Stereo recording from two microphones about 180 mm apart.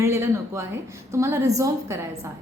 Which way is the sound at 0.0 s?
15° right (ahead or behind).